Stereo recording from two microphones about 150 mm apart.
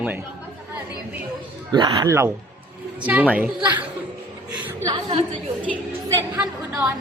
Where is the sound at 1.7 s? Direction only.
30° right (ahead or behind); by 3.5 s 10° right (ahead or behind).